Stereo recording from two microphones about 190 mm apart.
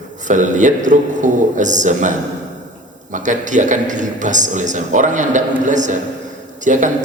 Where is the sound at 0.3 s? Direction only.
40° right (ahead or behind).